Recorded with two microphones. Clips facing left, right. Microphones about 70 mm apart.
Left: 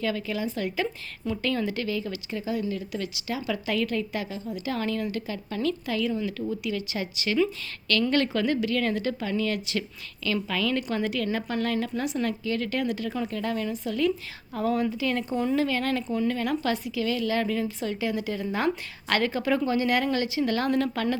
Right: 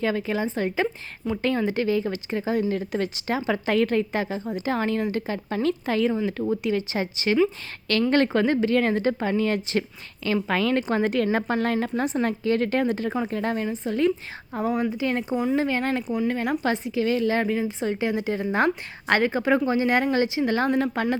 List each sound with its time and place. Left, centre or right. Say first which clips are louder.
0.0 s speech: right 4 dB; right
14.5 s a woman's voice: right 1 dB; centre
15.3 s speech: right 2 dB; centre
15.5 s a woman's voice: right 2 dB; right
16.0 s speech: right 1 dB; centre
16.3 s a woman's voice: right 2 dB; right